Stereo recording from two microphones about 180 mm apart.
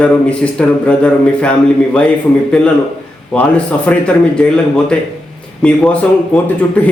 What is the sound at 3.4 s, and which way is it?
A man's voice, 5° left (ahead or behind).